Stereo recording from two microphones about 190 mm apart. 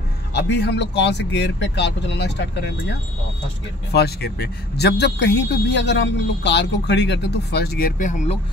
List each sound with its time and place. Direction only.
0.3 s a man's voice: 60° left (ahead or behind); by 8.4 s 40° left (ahead or behind)